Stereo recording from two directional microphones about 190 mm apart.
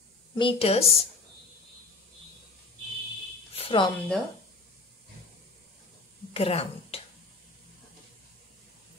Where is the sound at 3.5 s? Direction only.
30° left (ahead or behind).